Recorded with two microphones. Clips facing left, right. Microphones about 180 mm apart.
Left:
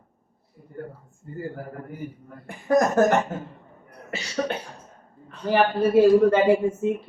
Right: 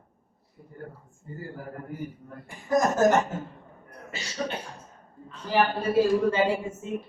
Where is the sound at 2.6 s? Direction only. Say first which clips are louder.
Left 3 dB; 60° left (ahead or behind).